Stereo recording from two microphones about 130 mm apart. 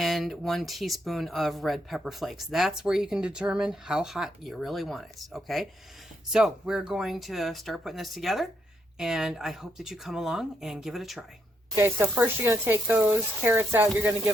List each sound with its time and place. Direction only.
0.0 s speech: centre (ahead or behind)
11.8 s speech: 15° right (ahead or behind)